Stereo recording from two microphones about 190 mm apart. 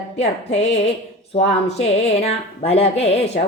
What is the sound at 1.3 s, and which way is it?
Speech, 35° left (ahead or behind).